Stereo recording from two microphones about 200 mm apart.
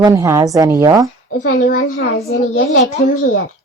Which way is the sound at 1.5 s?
40° left (ahead or behind).